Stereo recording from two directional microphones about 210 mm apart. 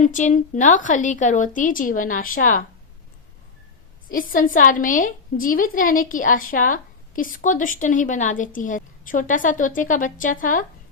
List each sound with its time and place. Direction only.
0.0 s a woman's voice: 35° left (ahead or behind)
4.1 s a woman's voice: 40° left (ahead or behind)